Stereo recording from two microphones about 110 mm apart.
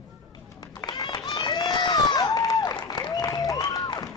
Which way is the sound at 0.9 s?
35° left (ahead or behind).